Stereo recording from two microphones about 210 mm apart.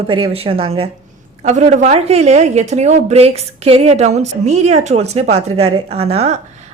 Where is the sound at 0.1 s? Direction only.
25° right (ahead or behind).